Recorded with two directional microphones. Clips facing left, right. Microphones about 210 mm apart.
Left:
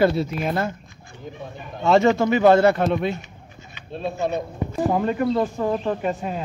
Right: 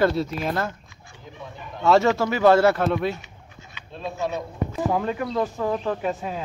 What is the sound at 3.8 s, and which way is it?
Speech, 55° left (ahead or behind).